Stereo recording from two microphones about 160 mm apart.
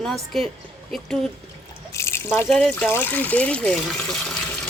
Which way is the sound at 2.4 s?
5° left (ahead or behind).